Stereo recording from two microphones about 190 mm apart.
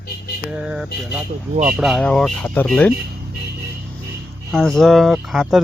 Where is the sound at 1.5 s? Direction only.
40° right (ahead or behind).